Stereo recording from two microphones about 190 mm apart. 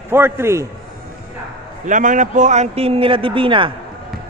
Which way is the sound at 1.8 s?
40° right (ahead or behind).